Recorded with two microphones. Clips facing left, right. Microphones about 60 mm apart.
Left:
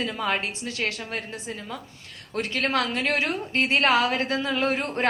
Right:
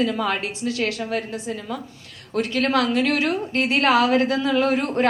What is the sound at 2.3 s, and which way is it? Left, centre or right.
A woman's voice, left.